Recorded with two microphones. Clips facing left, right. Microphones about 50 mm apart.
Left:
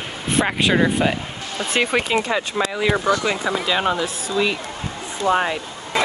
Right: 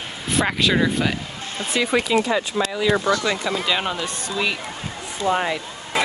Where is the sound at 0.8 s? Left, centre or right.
Centre.